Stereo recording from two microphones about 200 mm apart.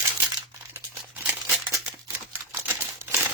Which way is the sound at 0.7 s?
10° right (ahead or behind).